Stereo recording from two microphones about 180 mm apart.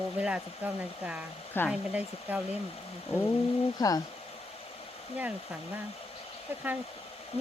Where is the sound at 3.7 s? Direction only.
20° left (ahead or behind).